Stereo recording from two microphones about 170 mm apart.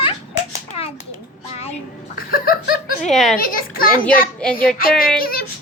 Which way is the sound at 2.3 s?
60° left (ahead or behind).